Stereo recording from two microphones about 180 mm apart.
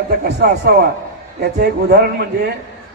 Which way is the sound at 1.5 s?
60° right (ahead or behind).